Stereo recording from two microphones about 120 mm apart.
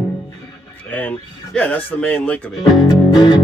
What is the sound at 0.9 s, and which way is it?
Speech, 15° left (ahead or behind).